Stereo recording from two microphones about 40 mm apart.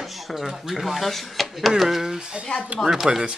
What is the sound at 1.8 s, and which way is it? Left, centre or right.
Speech, centre.